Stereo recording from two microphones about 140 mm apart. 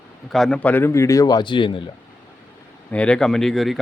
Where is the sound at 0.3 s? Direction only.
Centre (ahead or behind); by 1.8 s 35° left (ahead or behind).